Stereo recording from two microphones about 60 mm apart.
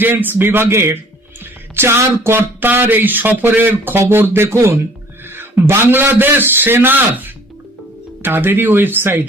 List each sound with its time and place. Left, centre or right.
0.0 s speech: right
1.7 s music: right
2.0 s speech: right
2.6 s speech: right
4.4 s speech: right
5.2 s a sound: right
5.6 s speech: right